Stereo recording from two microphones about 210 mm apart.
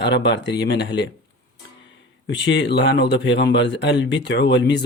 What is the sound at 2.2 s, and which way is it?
Speech, 60° left (ahead or behind).